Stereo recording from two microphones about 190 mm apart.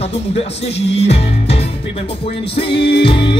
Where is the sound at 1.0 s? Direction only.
35° left (ahead or behind).